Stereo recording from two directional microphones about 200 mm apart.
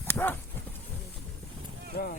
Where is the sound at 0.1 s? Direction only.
10° left (ahead or behind).